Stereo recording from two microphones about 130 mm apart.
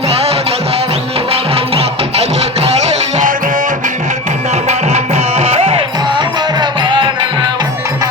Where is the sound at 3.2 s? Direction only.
90° right.